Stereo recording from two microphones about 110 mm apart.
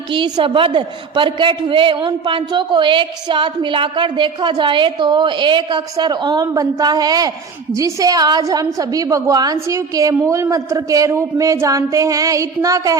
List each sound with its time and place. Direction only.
0.1 s a man's voice: 50° right (ahead or behind); by 13.0 s 30° right (ahead or behind)